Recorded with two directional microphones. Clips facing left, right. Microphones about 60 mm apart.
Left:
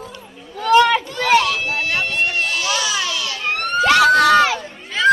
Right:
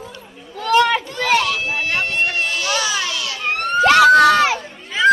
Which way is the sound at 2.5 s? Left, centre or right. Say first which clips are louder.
Even; right.